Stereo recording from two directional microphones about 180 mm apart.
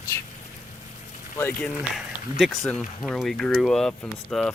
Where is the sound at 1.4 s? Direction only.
15° left (ahead or behind).